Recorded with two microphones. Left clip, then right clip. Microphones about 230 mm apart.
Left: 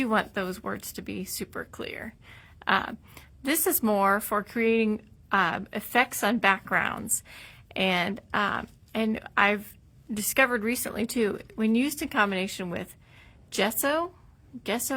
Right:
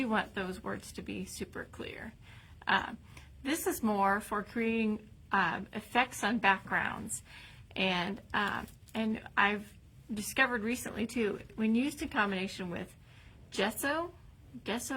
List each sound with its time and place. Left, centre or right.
0.0 s speech: left